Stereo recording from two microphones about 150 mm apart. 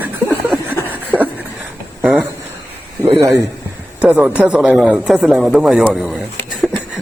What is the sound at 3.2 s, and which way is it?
Speech, 20° right (ahead or behind).